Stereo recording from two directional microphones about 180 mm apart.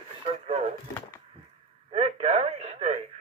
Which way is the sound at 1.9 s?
35° right (ahead or behind).